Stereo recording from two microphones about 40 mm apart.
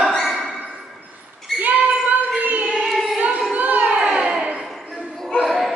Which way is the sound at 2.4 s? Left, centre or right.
Right.